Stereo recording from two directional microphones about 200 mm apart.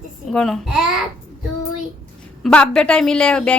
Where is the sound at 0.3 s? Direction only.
Centre (ahead or behind).